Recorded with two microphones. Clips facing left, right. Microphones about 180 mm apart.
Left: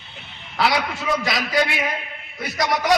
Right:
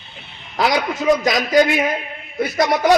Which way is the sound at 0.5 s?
40° right (ahead or behind).